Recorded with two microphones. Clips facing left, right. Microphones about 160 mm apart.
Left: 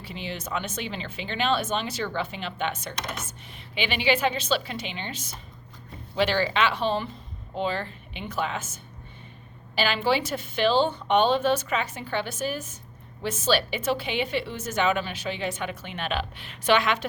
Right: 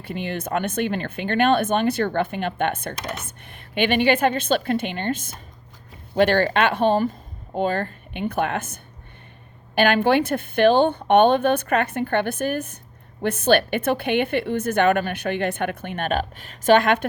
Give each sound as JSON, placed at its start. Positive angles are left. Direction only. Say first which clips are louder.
{"t": 0.0, "sound": "a woman's voice", "louder": "right 7 dB", "side_deg": -55}